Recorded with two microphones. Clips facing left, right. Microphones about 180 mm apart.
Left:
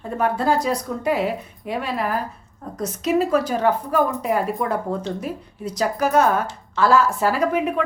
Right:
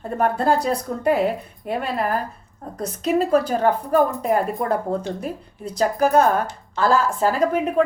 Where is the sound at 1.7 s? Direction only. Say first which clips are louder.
Right 1 dB; 45° right (ahead or behind).